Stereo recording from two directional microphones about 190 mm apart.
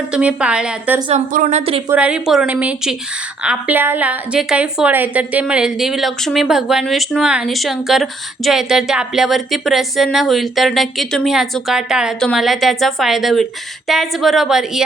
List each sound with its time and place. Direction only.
0.1 s speech: 5° right (ahead or behind)
1.1 s a woman's voice: 40° right (ahead or behind)
1.9 s speech: 5° right (ahead or behind)